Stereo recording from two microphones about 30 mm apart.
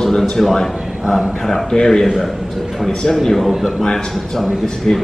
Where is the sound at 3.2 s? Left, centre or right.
Centre.